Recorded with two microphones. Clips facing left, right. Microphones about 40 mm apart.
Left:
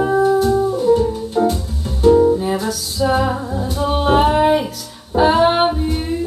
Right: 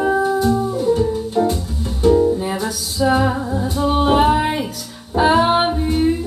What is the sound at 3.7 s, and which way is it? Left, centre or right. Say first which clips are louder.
Singing: even; centre.